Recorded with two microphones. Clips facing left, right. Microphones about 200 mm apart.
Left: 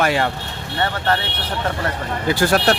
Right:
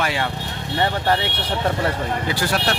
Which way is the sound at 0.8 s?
15° right (ahead or behind).